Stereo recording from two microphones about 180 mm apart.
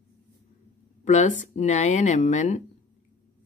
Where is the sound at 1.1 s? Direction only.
40° left (ahead or behind).